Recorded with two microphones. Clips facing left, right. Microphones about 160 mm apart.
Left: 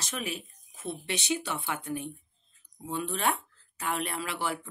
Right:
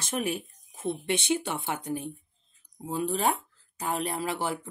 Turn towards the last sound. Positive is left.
turn(degrees=-40)  # may be behind; listen again after turning